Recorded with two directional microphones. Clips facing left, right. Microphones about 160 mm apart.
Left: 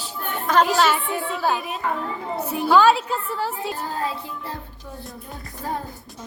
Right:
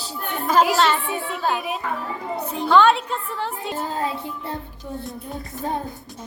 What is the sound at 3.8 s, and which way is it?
Child singing, 20° right (ahead or behind).